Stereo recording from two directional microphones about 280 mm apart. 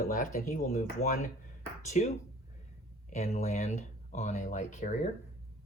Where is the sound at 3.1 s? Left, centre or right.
Left.